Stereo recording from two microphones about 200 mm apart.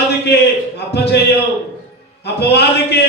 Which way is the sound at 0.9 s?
55° left (ahead or behind).